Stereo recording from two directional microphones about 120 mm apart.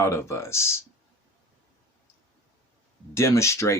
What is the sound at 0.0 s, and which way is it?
Speech, 20° left (ahead or behind).